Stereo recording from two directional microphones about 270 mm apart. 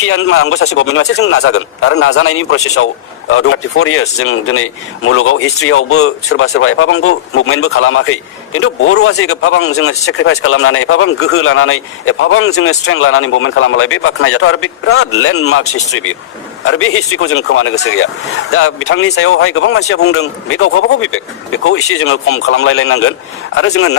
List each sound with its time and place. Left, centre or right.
0.0 s speech: left
16.6 s speech: left